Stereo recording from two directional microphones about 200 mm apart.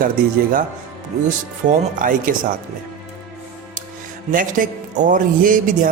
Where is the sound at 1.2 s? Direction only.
40° right (ahead or behind).